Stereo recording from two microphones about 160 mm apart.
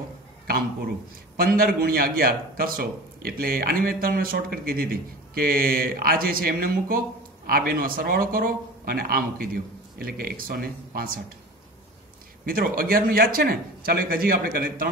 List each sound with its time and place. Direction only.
1.3 s a man's voice: 65° right (ahead or behind)
12.4 s a man's voice: 65° right (ahead or behind)